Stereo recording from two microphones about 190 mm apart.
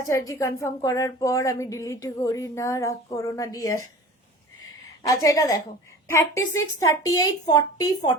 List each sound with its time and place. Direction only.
0.1 s speech: 15° left (ahead or behind)
5.0 s a woman's voice: 20° left (ahead or behind)